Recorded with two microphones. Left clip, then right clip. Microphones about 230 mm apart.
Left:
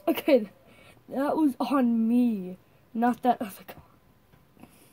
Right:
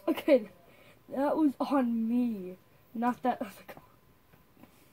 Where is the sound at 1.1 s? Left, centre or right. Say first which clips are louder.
Left 3 dB; left.